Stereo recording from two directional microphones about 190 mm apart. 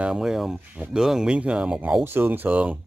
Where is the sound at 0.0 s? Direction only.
5° right (ahead or behind).